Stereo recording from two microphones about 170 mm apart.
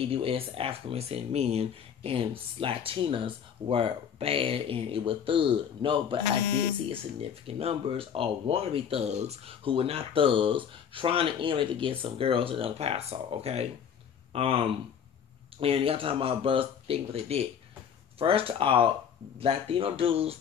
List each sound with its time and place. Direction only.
0.1 s speech: 35° right (ahead or behind)